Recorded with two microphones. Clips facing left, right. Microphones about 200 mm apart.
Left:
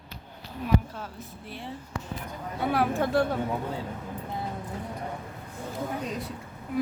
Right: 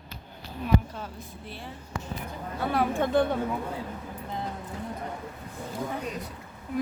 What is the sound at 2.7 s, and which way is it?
Speech, 5° left (ahead or behind).